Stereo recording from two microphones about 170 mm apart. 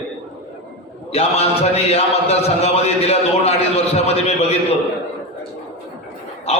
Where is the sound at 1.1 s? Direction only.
35° left (ahead or behind).